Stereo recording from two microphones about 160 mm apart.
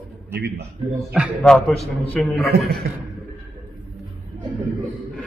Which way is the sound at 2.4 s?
90° right.